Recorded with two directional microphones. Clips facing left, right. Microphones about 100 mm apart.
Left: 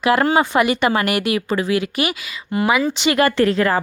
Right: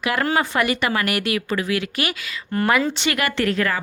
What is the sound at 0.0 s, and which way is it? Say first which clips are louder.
Speech: left 5 dB; 25° left (ahead or behind).